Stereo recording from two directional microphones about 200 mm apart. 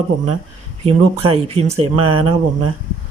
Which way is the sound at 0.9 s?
30° right (ahead or behind).